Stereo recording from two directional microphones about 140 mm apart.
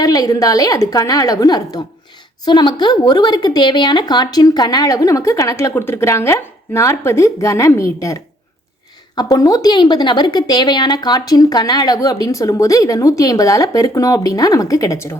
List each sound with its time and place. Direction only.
0.0 s a woman's voice: 25° left (ahead or behind)